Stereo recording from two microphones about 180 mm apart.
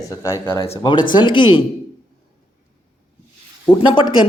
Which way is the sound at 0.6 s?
30° left (ahead or behind).